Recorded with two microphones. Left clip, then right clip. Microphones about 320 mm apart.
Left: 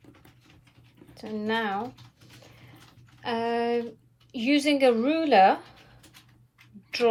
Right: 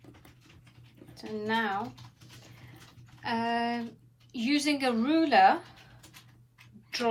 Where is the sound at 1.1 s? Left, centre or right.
Centre.